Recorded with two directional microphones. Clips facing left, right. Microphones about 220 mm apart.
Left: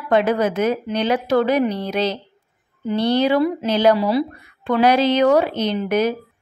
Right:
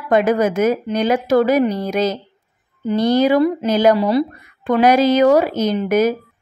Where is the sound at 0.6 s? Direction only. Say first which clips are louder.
Right 3 dB; 5° right (ahead or behind).